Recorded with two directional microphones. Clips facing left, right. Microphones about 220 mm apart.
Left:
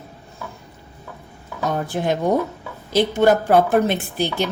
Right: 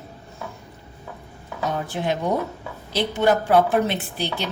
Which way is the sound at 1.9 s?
50° left (ahead or behind).